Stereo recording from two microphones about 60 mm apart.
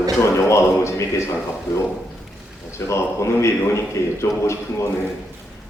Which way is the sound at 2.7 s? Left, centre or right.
Left.